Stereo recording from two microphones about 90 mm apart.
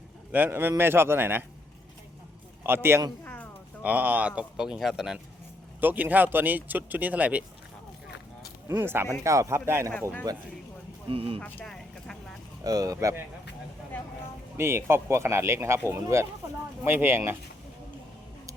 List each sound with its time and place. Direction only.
0.3 s speech: 20° right (ahead or behind)
2.6 s speech: 25° right (ahead or behind)
3.2 s a sound: 15° left (ahead or behind)
3.8 s speech: 20° right (ahead or behind)
5.8 s speech: 20° right (ahead or behind)
8.7 s speech: 25° right (ahead or behind)
10.3 s speech: 45° right (ahead or behind)
11.1 s speech: 90° right
11.3 s speech: 20° left (ahead or behind)
11.6 s vehicle: 5° left (ahead or behind)
12.6 s speech: 40° right (ahead or behind)
13.9 s a sound: 20° left (ahead or behind)
14.6 s speech: 30° right (ahead or behind)